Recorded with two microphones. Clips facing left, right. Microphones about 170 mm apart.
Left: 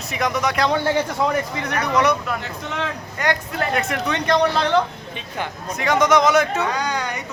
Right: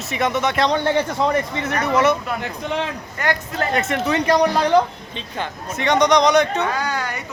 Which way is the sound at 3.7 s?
Centre (ahead or behind).